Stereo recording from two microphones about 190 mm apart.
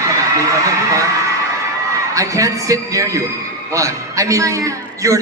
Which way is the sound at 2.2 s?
15° right (ahead or behind).